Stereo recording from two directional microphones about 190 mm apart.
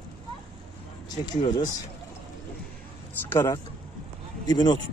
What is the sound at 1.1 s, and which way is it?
Speech, 20° left (ahead or behind).